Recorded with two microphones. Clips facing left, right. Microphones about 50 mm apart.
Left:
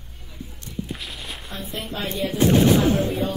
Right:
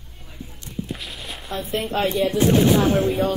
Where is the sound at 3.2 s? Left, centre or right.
Right.